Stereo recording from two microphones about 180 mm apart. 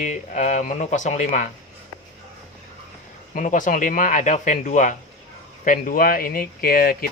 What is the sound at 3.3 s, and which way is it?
Speech, 45° left (ahead or behind).